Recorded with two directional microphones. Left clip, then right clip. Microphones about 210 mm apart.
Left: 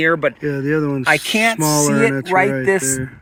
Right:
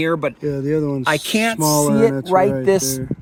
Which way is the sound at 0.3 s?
5° right (ahead or behind).